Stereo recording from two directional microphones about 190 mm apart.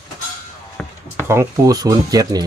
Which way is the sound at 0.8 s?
5° left (ahead or behind).